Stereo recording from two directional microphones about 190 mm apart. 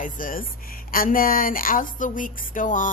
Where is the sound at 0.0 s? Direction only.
45° left (ahead or behind).